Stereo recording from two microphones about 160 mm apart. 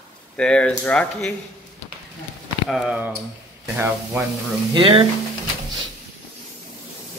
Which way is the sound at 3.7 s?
15° right (ahead or behind).